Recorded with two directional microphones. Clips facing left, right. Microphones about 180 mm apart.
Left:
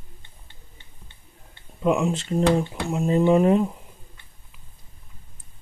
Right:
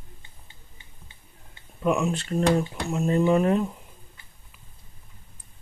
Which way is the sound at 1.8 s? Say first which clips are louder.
Left 2 dB; 20° left (ahead or behind).